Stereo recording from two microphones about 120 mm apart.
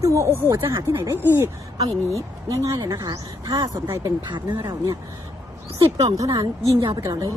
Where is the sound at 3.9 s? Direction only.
20° right (ahead or behind).